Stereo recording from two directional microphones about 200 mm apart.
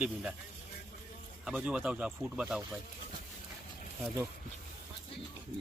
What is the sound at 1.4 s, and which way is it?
Speech, 5° right (ahead or behind).